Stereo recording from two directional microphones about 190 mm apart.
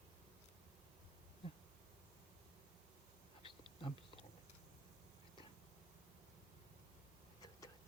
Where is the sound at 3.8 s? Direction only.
25° left (ahead or behind).